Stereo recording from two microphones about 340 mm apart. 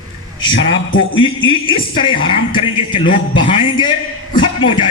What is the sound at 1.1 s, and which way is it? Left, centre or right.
A man's voice, centre.